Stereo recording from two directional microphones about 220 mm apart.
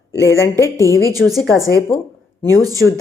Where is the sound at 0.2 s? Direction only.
15° left (ahead or behind).